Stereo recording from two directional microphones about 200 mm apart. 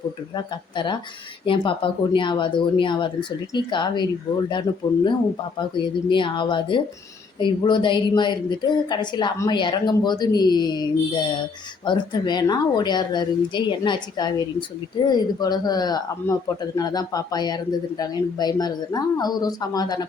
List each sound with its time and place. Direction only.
0.3 s speech: 25° left (ahead or behind)
6.1 s speech: 25° left (ahead or behind)